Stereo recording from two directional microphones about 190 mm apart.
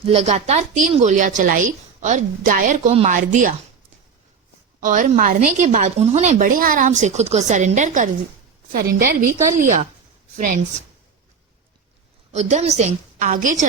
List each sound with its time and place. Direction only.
0.0 s a woman's voice: 35° right (ahead or behind)
4.8 s a woman's voice: 45° right (ahead or behind)
9.6 s a woman's voice: 40° right (ahead or behind)
12.3 s a woman's voice: 35° right (ahead or behind)